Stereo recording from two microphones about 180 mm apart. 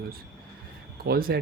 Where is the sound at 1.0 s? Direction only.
55° right (ahead or behind).